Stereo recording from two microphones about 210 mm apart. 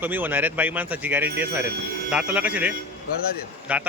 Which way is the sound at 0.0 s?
10° right (ahead or behind).